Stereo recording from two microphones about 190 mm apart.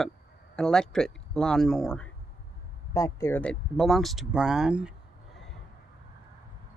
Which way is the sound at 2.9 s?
15° left (ahead or behind).